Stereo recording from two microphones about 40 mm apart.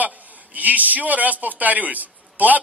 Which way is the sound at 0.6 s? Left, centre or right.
Right.